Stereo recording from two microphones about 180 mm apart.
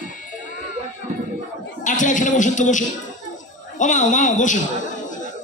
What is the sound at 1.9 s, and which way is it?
A man's voice, 45° left (ahead or behind).